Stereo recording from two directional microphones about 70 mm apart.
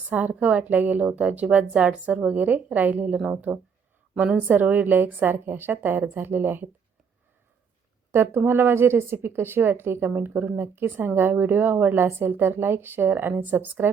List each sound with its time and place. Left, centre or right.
0.1 s a woman's voice: right
8.1 s speech: right